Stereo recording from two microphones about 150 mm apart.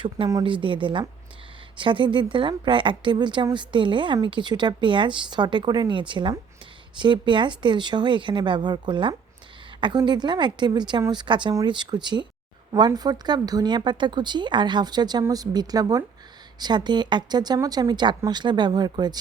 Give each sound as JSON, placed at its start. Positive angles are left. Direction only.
{"t": 0.3, "sound": "a woman's voice", "side_deg": -30}